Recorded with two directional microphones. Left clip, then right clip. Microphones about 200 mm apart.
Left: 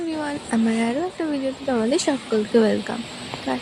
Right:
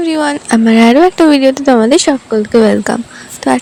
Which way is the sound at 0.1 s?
45° right (ahead or behind).